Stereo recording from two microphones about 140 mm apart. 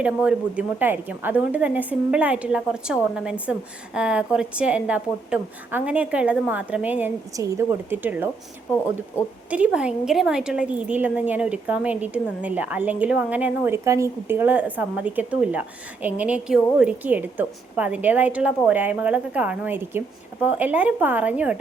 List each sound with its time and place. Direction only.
0.0 s speech: 10° right (ahead or behind)
9.5 s speech: 10° right (ahead or behind)
13.8 s speech: 20° right (ahead or behind)